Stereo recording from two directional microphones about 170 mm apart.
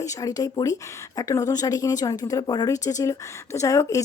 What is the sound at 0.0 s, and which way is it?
A woman's voice, 20° left (ahead or behind).